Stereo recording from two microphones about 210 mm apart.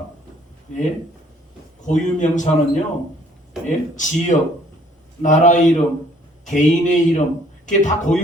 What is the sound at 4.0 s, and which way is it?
A man's voice, 35° left (ahead or behind).